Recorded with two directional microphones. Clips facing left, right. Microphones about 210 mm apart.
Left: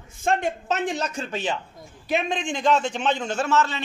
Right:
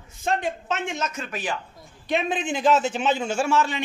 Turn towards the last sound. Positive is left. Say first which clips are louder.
# even
turn(degrees=-10)  # may be behind; listen again after turning